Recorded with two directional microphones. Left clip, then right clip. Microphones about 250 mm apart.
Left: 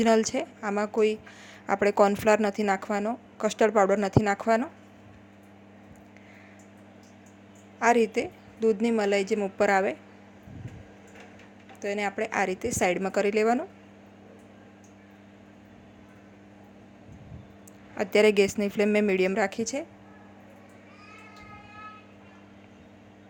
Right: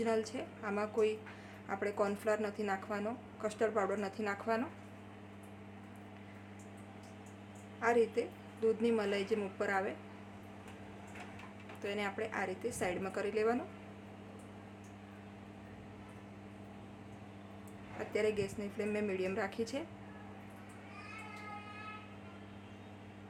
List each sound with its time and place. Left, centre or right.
0.0 s speech: left
7.8 s speech: left
11.8 s speech: left
17.9 s speech: left